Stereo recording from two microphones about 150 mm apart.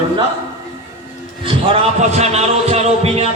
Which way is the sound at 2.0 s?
45° right (ahead or behind).